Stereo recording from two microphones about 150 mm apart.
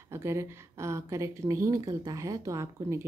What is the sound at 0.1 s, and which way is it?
A woman's voice, 15° right (ahead or behind).